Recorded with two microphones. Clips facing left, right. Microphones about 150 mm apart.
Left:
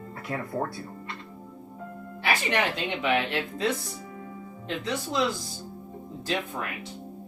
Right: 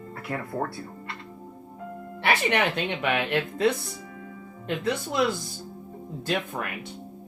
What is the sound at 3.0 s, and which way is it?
Speech, 60° right (ahead or behind).